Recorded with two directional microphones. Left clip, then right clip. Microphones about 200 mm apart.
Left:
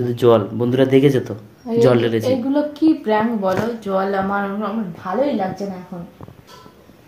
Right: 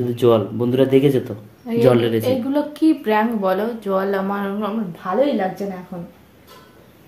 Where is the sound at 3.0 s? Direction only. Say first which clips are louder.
Even; 25° right (ahead or behind).